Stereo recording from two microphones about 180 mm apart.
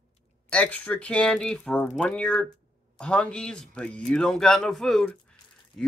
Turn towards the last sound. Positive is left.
turn(degrees=5)  # may be behind; listen again after turning